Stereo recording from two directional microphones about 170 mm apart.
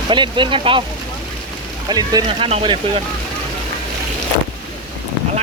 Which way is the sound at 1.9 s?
25° right (ahead or behind).